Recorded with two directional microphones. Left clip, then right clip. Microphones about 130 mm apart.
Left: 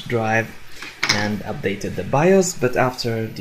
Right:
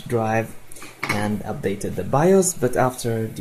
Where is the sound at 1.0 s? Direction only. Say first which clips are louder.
Left 3 dB; centre (ahead or behind).